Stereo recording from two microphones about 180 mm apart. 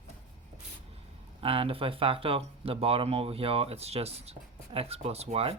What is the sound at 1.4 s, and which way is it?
Speech, 30° right (ahead or behind).